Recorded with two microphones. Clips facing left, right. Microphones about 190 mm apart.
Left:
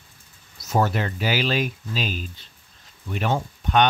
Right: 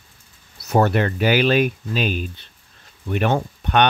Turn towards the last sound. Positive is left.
turn(degrees=-60)  # may be behind; listen again after turning